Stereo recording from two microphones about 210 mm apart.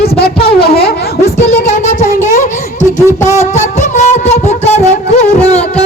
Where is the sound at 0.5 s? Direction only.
50° left (ahead or behind).